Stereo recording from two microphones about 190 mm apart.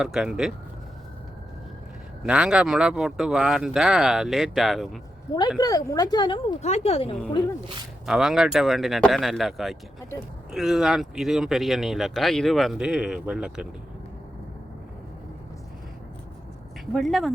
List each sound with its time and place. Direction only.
0.0 s speech: 5° right (ahead or behind)
2.2 s speech: 5° right (ahead or behind)
5.5 s speech: 20° left (ahead or behind)
6.6 s speech: 35° left (ahead or behind)
8.0 s speech: centre (ahead or behind)
16.8 s speech: centre (ahead or behind)